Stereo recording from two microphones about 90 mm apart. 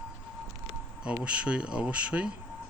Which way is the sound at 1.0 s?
10° right (ahead or behind).